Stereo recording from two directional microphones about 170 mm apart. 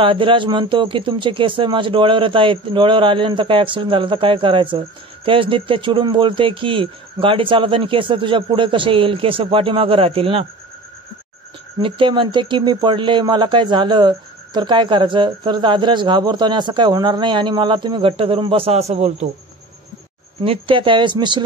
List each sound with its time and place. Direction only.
0.0 s a man's voice: 30° right (ahead or behind)
11.8 s speech: 30° right (ahead or behind)
20.4 s speech: 30° right (ahead or behind)